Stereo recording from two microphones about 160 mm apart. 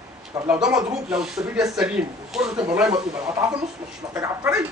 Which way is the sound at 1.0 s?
5° right (ahead or behind).